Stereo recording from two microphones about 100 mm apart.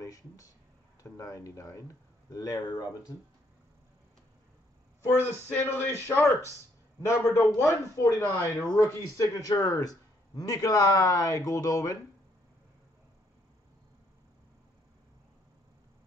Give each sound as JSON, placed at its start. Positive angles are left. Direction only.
{"t": 0.0, "sound": "a sound", "side_deg": 35}
{"t": 1.0, "sound": "a man's voice", "side_deg": 35}
{"t": 5.0, "sound": "a man's voice", "side_deg": 20}